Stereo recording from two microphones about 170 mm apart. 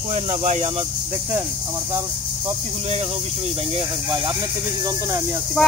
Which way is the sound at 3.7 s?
25° right (ahead or behind).